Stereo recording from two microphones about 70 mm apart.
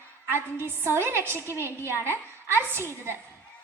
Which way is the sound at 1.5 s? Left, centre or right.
Left.